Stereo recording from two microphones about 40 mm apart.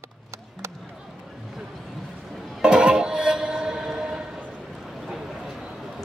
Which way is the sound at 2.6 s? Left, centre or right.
Centre.